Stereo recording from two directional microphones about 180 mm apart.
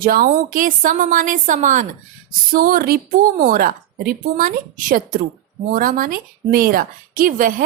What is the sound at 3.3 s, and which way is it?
Speech, 50° right (ahead or behind).